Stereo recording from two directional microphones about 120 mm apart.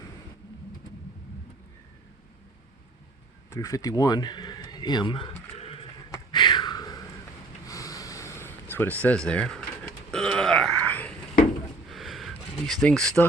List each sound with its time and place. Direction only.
3.5 s speech: 25° left (ahead or behind); by 5.3 s 45° left (ahead or behind)
5.5 s a sound: 55° left (ahead or behind)
6.3 s a sound: 40° left (ahead or behind); by 9.6 s 5° left (ahead or behind)
10.1 s burping: 5° left (ahead or behind)
11.9 s vehicle: centre (ahead or behind)
12.6 s speech: 5° left (ahead or behind)